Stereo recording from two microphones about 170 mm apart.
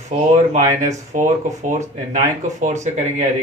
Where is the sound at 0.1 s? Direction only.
40° right (ahead or behind).